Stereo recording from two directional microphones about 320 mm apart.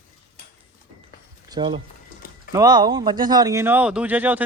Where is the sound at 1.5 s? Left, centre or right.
Centre.